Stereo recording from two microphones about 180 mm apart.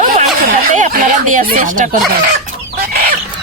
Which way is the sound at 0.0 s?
45° right (ahead or behind).